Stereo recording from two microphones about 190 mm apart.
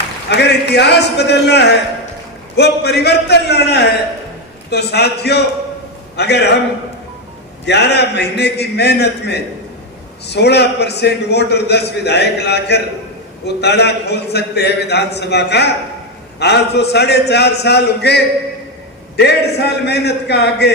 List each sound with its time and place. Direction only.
0.3 s a man's voice: 60° left (ahead or behind)
7.6 s a man's voice: 65° left (ahead or behind)